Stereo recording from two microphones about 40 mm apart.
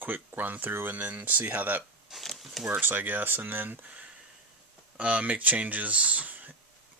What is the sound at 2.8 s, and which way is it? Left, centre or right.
Speech, right.